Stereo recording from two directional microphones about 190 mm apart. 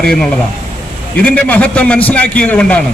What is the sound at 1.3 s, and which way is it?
A man's voice, 5° left (ahead or behind).